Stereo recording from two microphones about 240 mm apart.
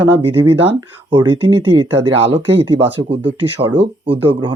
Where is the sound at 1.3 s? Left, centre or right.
Centre.